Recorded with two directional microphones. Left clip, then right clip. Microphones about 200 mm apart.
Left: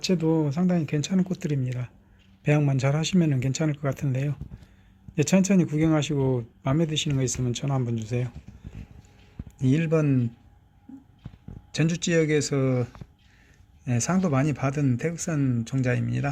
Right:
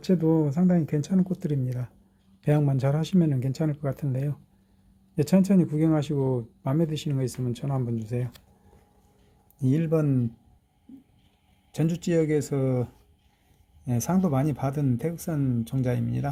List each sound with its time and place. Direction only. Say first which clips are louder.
0.1 s a man's voice: right 3 dB; 10° right (ahead or behind)
9.6 s speech: left 1 dB; centre (ahead or behind)
11.7 s speech: left 2 dB; centre (ahead or behind)